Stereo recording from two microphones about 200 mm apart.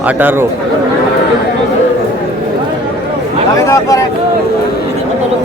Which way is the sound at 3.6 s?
15° left (ahead or behind).